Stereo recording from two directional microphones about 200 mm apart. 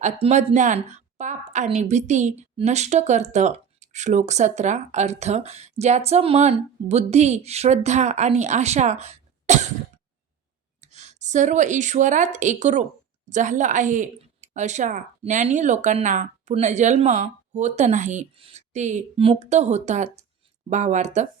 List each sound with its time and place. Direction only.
0.0 s a woman's voice: 35° right (ahead or behind)
10.8 s a woman's voice: 35° right (ahead or behind)